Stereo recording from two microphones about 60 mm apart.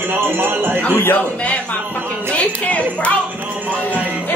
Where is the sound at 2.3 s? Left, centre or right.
Left.